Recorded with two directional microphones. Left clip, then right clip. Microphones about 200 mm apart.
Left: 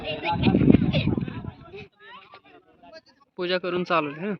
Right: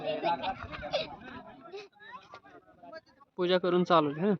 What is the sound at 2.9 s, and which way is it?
Bleat, 10° right (ahead or behind).